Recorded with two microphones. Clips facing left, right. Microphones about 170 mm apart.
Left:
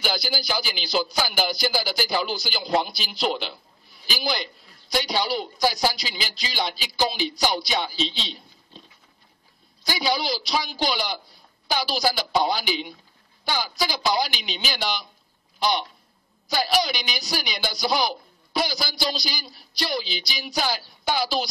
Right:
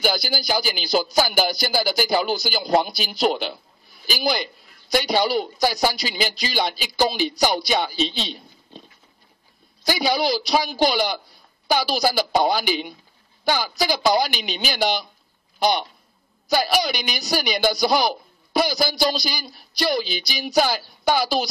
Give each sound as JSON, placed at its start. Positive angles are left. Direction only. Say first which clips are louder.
{"t": 0.0, "sound": "a man's voice", "louder": "right 4 dB", "side_deg": -45}
{"t": 9.8, "sound": "a man's voice", "louder": "right 4 dB", "side_deg": -50}
{"t": 16.4, "sound": "a man's voice", "louder": "right 3 dB", "side_deg": -50}